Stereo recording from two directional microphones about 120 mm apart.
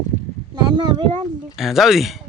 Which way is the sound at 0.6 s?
40° right (ahead or behind).